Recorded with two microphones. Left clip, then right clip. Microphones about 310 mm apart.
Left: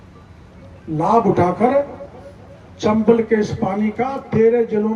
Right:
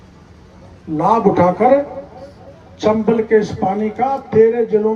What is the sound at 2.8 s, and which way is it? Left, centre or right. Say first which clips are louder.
A man's voice: even; centre.